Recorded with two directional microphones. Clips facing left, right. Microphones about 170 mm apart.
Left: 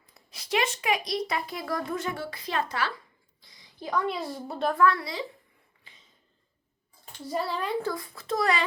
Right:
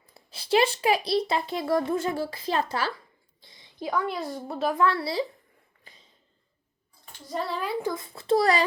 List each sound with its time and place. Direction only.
0.1 s speech: 30° right (ahead or behind)
3.4 s a sound: 25° right (ahead or behind)
4.1 s a woman's voice: centre (ahead or behind)
4.7 s speech: 25° right (ahead or behind)
5.9 s a sound: 40° right (ahead or behind)
7.3 s a woman's voice: centre (ahead or behind)
7.8 s a child's voice: 15° right (ahead or behind)
8.1 s a child's voice: 30° right (ahead or behind)